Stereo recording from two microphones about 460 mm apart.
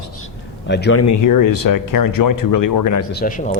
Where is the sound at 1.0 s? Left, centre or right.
Left.